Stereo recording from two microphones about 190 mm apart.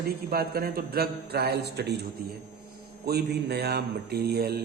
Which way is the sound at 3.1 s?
55° right (ahead or behind).